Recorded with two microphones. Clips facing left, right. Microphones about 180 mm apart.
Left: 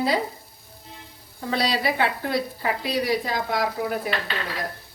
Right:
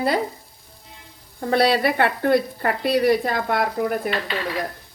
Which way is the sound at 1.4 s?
55° right (ahead or behind).